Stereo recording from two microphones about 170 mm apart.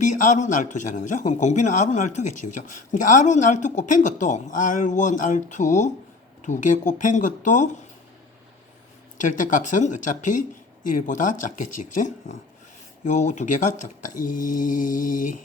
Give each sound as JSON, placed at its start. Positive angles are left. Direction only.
{"t": 0.0, "sound": "speech", "side_deg": 50}
{"t": 9.1, "sound": "speech", "side_deg": 50}